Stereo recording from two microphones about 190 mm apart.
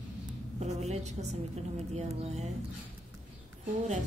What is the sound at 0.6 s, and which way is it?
A woman's voice, 35° right (ahead or behind).